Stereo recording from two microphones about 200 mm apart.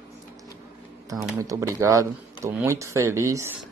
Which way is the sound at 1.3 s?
15° right (ahead or behind).